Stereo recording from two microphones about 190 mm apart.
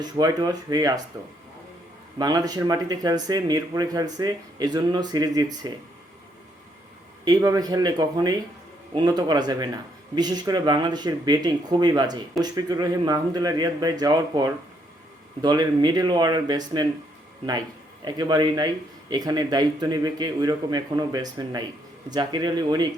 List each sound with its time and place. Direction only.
0.0 s speech: 20° right (ahead or behind)
2.1 s speech: 20° right (ahead or behind)
7.3 s speech: 20° right (ahead or behind)
18.0 s speech: 20° right (ahead or behind)